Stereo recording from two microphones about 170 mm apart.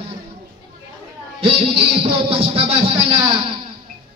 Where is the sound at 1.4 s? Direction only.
35° right (ahead or behind).